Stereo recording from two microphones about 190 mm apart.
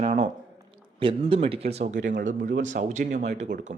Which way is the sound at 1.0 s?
25° right (ahead or behind).